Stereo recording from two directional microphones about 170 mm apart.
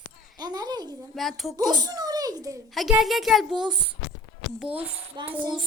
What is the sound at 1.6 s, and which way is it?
Speech, 20° right (ahead or behind).